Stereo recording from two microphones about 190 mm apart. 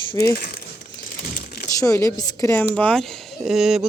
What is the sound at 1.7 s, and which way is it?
Speech, 15° left (ahead or behind).